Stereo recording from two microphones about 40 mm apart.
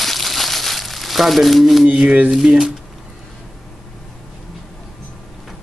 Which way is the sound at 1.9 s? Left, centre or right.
Right.